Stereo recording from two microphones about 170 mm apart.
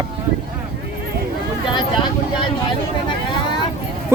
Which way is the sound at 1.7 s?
25° left (ahead or behind).